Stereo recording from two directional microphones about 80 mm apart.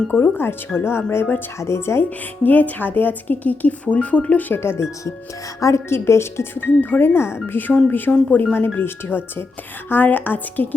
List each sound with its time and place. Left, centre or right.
0.1 s speech: left
2.0 s speech: left